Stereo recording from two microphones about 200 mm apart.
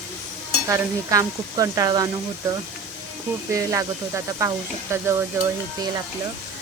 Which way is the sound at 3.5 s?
15° right (ahead or behind).